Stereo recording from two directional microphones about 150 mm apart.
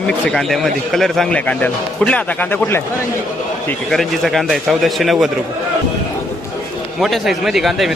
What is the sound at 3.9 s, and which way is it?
Speech, centre (ahead or behind).